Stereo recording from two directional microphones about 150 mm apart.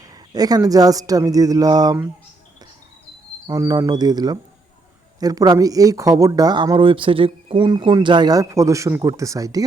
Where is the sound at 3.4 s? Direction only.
25° right (ahead or behind).